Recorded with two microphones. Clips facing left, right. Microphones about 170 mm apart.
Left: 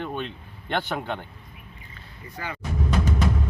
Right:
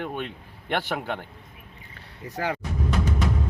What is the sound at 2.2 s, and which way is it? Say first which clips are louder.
Speech: right 7 dB; 80° right.